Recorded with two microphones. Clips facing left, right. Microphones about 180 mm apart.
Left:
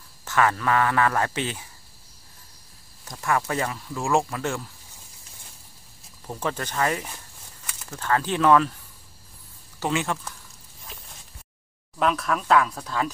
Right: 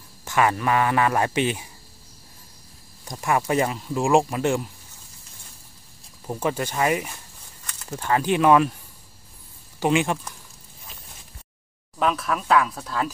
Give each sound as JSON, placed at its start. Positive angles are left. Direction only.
{"t": 0.2, "sound": "speech", "side_deg": -15}
{"t": 3.1, "sound": "speech", "side_deg": -15}
{"t": 6.2, "sound": "speech", "side_deg": -10}
{"t": 9.8, "sound": "speech", "side_deg": -15}
{"t": 12.0, "sound": "speech", "side_deg": 0}